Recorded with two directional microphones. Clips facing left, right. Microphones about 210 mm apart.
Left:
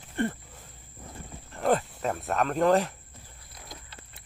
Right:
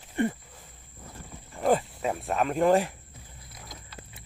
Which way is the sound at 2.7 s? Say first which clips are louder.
Right 1 dB; 15° right (ahead or behind).